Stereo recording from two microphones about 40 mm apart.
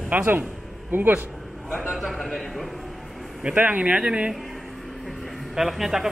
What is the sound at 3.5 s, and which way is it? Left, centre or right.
Speech, right.